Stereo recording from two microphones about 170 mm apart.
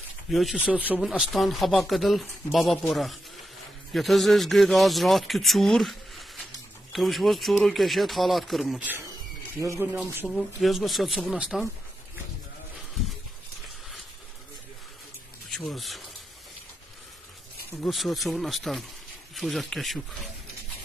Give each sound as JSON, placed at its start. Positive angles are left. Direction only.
{"t": 0.3, "sound": "speech", "side_deg": 0}
{"t": 10.2, "sound": "speech", "side_deg": 0}
{"t": 15.5, "sound": "speech", "side_deg": 0}
{"t": 17.8, "sound": "speech", "side_deg": 0}